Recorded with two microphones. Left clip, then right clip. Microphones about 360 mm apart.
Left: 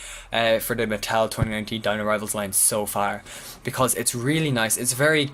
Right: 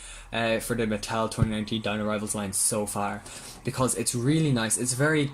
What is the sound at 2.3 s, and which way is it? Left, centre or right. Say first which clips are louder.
Speech: left 5 dB; left.